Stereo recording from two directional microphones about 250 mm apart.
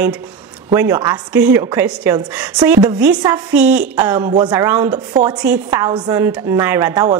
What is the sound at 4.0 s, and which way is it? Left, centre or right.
A woman's voice, centre.